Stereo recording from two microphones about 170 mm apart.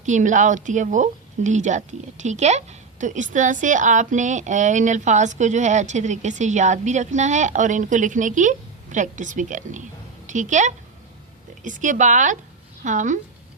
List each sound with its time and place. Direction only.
0.0 s a woman's voice: 45° right (ahead or behind)